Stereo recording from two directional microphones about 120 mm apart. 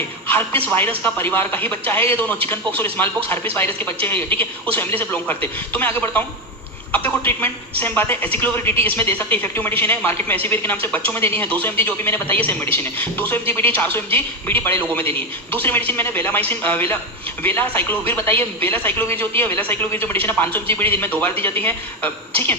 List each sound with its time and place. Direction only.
0.3 s a woman's voice: 15° left (ahead or behind)